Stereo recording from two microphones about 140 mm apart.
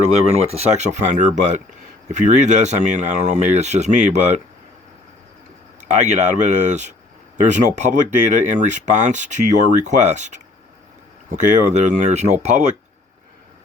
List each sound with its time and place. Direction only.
0.0 s speech: 50° right (ahead or behind)
5.9 s speech: 55° right (ahead or behind)